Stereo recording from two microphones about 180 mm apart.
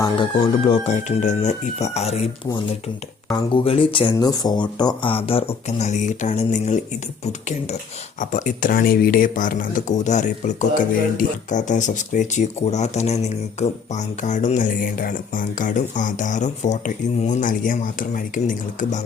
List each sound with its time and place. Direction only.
0.0 s speech: 30° left (ahead or behind)
3.3 s speech: 30° left (ahead or behind)
8.2 s speech: 45° left (ahead or behind)